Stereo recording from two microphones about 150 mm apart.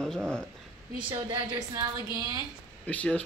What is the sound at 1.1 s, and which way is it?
A woman's voice, 30° right (ahead or behind).